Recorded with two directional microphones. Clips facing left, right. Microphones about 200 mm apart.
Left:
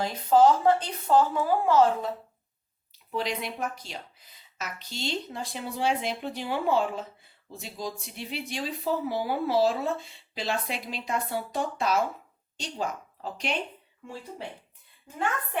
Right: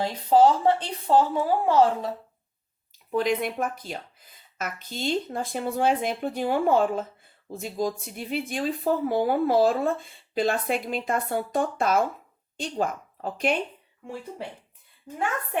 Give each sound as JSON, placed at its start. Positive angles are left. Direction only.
{"t": 0.0, "sound": "speech", "side_deg": -30}
{"t": 3.1, "sound": "a woman's voice", "side_deg": -50}